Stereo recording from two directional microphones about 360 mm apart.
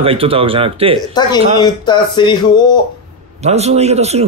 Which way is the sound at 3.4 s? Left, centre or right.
Centre.